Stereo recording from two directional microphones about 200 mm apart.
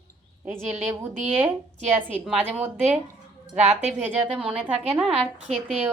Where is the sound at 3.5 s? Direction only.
35° right (ahead or behind).